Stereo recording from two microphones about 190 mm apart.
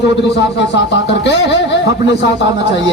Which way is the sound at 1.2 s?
65° left (ahead or behind).